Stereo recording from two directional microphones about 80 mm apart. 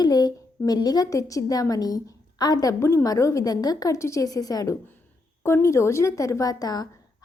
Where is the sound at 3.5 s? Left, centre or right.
Left.